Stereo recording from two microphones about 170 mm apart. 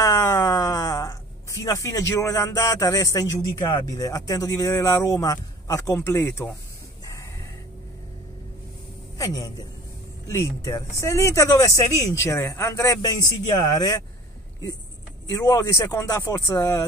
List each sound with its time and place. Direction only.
0.0 s speech: 20° left (ahead or behind)
9.2 s speech: 20° left (ahead or behind)
15.2 s speech: 20° left (ahead or behind)